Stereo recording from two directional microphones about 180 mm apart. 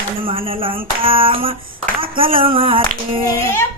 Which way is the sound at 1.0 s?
30° right (ahead or behind).